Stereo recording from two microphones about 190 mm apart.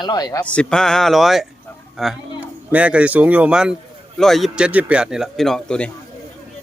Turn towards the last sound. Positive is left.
turn(degrees=5)  # may be behind; listen again after turning